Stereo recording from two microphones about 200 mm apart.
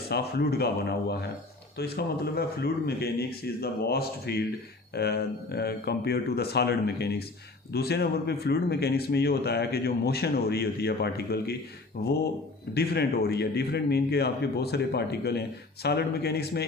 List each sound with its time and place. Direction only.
0.1 s a man's voice: 55° left (ahead or behind)